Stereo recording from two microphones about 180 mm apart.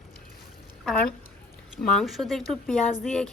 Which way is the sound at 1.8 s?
Centre (ahead or behind).